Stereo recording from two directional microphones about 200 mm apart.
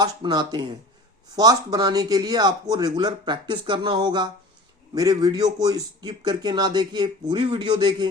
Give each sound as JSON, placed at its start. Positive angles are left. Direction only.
{"t": 0.0, "sound": "a man's voice", "side_deg": -20}